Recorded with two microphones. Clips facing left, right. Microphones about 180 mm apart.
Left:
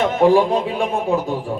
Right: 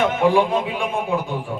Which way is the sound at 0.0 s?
40° left (ahead or behind).